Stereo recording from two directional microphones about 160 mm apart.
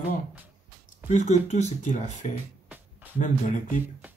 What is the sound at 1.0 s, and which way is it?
Speech, 45° left (ahead or behind).